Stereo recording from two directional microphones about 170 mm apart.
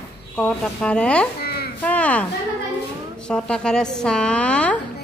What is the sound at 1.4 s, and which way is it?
Babbling, 65° left (ahead or behind).